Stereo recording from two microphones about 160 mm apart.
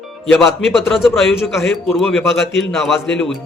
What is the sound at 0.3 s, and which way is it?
A man's voice, centre (ahead or behind).